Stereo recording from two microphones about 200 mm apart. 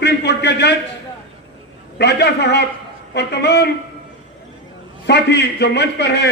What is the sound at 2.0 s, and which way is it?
A man's voice, 55° left (ahead or behind).